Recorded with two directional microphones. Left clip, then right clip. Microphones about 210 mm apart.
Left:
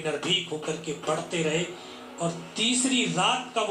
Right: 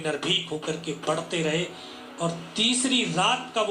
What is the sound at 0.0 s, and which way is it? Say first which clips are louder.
Speech: right 1 dB; 35° right (ahead or behind).